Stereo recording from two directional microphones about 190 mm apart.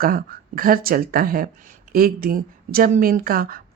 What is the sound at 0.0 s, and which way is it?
A woman's voice, 50° right (ahead or behind).